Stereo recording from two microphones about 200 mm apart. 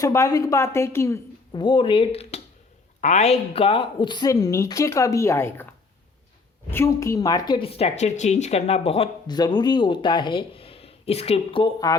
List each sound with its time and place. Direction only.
0.0 s a woman's voice: 15° left (ahead or behind)
6.7 s a woman's voice: 15° left (ahead or behind)